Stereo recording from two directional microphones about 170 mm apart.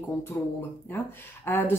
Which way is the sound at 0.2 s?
15° left (ahead or behind).